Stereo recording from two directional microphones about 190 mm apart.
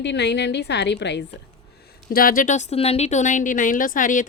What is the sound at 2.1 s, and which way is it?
Speech, 50° left (ahead or behind).